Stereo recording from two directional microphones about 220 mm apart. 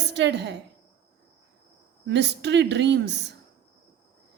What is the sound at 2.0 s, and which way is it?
A woman's voice, 50° right (ahead or behind).